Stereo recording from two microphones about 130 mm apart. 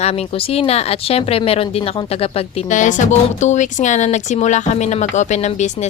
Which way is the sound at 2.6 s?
75° left (ahead or behind).